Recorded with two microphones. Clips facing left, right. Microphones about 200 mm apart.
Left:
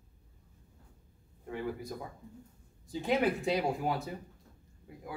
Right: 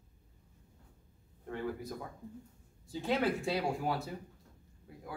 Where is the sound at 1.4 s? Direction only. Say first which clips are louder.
Left 1 dB; 10° left (ahead or behind).